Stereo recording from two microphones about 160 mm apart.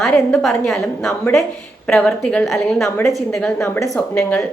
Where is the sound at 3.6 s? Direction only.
15° left (ahead or behind).